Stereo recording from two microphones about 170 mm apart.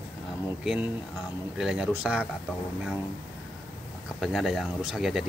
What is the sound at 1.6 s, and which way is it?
Speech, 5° right (ahead or behind).